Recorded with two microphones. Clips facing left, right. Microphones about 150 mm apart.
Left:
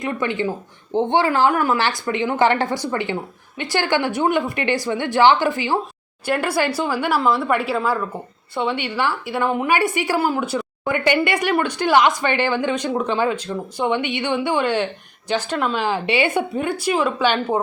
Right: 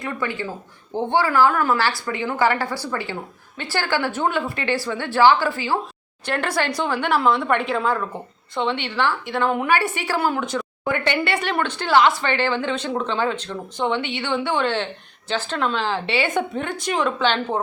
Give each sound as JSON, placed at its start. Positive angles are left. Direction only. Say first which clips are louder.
{"t": 0.0, "sound": "a woman's voice", "louder": "left 4 dB", "side_deg": 20}